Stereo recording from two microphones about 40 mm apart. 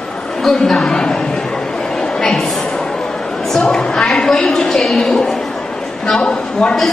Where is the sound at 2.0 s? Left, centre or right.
Left.